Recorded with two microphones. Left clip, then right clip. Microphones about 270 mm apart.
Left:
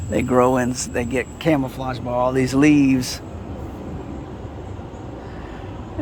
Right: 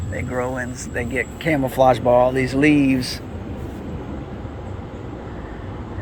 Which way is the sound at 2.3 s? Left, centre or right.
Centre.